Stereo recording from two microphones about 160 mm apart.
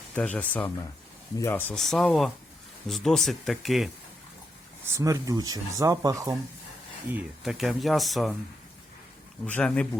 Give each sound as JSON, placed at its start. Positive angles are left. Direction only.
{"t": 0.2, "sound": "speech", "side_deg": 10}
{"t": 4.9, "sound": "speech", "side_deg": -20}
{"t": 7.1, "sound": "speech", "side_deg": -5}
{"t": 9.5, "sound": "speech", "side_deg": 5}